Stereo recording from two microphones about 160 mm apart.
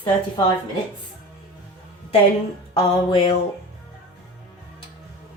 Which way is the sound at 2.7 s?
35° left (ahead or behind).